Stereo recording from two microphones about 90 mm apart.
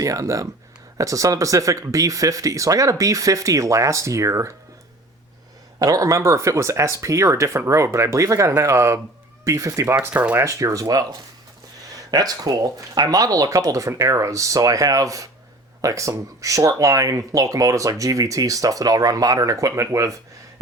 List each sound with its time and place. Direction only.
0.0 s speech: 40° right (ahead or behind)
5.8 s speech: 40° right (ahead or behind)
9.8 s speech: 25° right (ahead or behind)
10.4 s speech: 35° right (ahead or behind)